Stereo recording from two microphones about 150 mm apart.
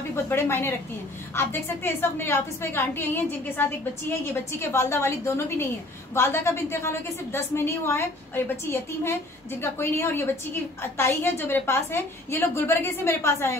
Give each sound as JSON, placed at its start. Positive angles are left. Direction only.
{"t": 0.1, "sound": "a woman's voice", "side_deg": 15}